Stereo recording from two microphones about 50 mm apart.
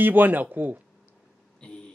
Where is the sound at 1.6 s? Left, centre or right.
Left.